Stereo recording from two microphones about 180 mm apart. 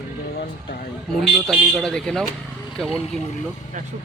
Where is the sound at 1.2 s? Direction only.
Centre (ahead or behind).